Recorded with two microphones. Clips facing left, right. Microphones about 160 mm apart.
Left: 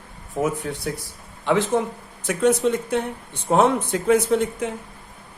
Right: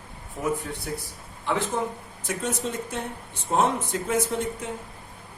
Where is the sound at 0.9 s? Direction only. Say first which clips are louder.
Left 3 dB; 90° left.